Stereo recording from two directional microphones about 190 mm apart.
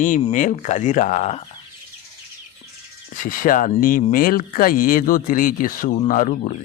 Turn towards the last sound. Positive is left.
turn(degrees=40)  # may be behind; listen again after turning